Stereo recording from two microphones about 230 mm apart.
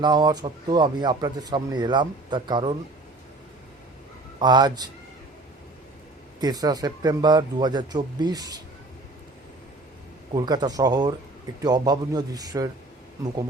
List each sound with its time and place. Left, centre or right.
0.0 s speech: centre
4.4 s speech: centre
6.4 s speech: centre
10.3 s speech: centre